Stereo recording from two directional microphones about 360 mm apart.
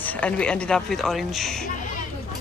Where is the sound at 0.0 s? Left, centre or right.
Centre.